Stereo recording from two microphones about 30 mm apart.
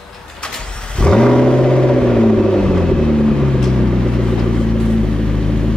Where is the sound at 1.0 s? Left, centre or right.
Left.